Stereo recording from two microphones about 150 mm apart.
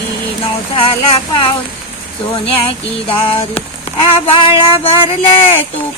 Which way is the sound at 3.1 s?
40° left (ahead or behind).